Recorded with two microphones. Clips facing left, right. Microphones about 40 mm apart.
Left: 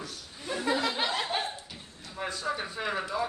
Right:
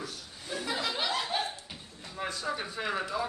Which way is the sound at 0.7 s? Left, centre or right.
Left.